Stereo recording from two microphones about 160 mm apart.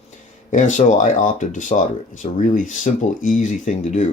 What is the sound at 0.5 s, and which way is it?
Speech, 50° left (ahead or behind).